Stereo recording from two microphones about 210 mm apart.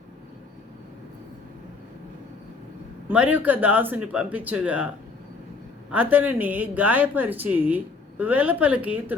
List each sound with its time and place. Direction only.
3.1 s speech: 5° right (ahead or behind)
5.9 s speech: 5° right (ahead or behind)